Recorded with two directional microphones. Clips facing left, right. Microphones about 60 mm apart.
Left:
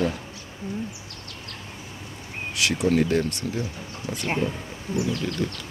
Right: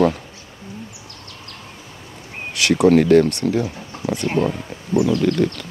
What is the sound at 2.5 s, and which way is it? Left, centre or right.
Speech, right.